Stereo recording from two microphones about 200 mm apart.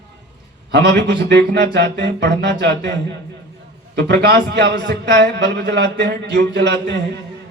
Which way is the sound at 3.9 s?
55° right (ahead or behind).